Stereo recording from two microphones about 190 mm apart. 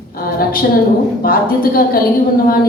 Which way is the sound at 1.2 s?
50° left (ahead or behind).